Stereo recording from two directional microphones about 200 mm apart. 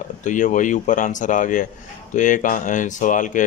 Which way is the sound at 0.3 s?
40° left (ahead or behind).